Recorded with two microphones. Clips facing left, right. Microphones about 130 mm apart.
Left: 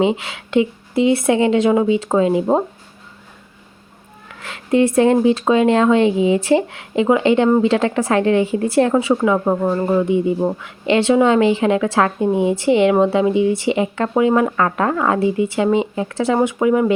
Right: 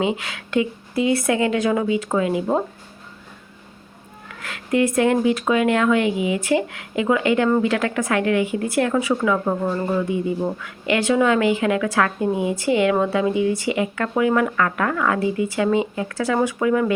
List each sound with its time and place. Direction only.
0.0 s speech: 25° left (ahead or behind)
4.4 s speech: 25° left (ahead or behind)